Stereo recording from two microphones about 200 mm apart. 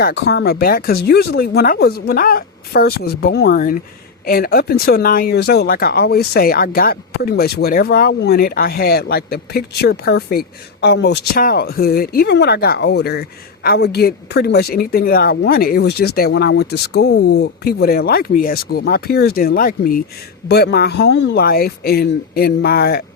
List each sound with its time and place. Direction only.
0.0 s speech: 55° left (ahead or behind)